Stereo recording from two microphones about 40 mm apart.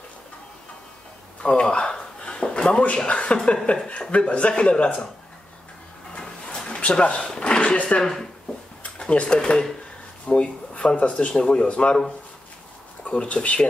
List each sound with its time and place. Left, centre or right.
1.4 s a sound: left
3.0 s speech: left
6.1 s a sound: left
7.2 s speech: centre
7.4 s speech: left
8.0 s speech: centre
8.8 s a sound: left
9.4 s speech: centre
11.3 s speech: left
11.6 s speech: left
13.0 s speech: left